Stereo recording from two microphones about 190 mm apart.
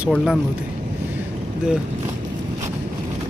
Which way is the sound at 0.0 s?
Centre (ahead or behind).